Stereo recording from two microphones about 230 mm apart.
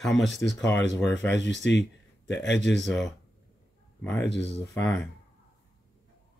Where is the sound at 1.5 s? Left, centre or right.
Left.